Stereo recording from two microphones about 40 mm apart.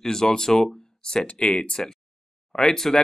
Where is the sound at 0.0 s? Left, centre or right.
Centre.